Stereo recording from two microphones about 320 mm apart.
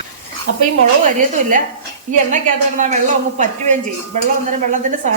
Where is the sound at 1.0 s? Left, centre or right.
Right.